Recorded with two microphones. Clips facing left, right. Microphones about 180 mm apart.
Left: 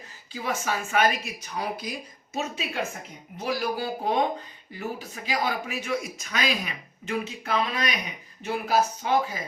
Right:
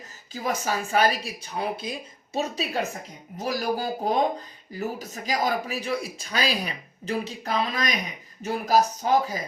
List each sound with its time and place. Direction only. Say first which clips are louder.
0.3 s speech: right 2 dB; 40° right (ahead or behind)